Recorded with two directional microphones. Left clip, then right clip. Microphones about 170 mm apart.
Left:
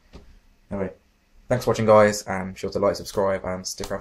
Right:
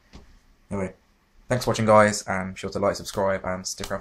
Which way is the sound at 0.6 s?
15° right (ahead or behind).